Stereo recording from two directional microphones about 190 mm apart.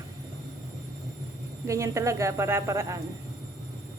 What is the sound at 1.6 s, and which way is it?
A woman's voice, 15° right (ahead or behind).